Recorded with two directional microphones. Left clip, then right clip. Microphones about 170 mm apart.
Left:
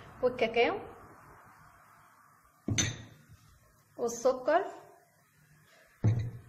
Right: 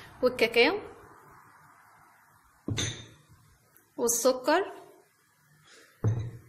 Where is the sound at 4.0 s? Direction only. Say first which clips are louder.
Right 4 dB; 40° right (ahead or behind).